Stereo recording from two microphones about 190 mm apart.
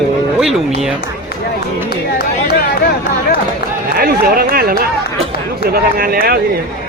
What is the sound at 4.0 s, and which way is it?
Speech, 50° right (ahead or behind).